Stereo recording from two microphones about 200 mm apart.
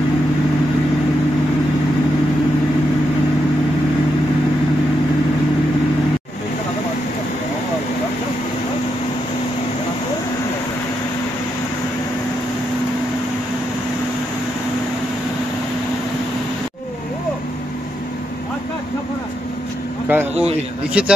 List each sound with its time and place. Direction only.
20.1 s vehicle: 10° right (ahead or behind)
21.0 s speech: 5° right (ahead or behind)